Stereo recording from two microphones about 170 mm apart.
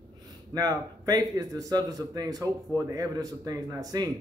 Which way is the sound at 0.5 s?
20° right (ahead or behind).